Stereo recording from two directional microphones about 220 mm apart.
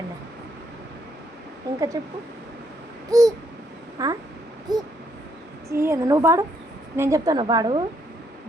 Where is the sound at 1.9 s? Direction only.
15° right (ahead or behind).